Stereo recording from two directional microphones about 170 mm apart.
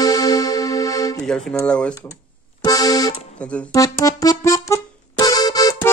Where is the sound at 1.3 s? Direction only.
5° left (ahead or behind).